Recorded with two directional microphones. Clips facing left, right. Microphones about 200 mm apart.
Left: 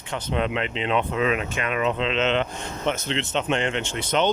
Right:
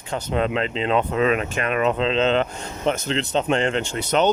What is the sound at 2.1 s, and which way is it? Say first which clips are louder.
Speech: right 3 dB; 35° right (ahead or behind).